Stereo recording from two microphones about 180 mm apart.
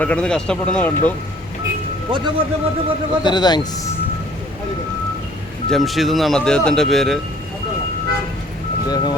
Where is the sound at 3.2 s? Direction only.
25° left (ahead or behind).